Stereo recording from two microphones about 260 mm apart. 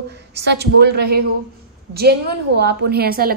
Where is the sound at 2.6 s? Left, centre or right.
Right.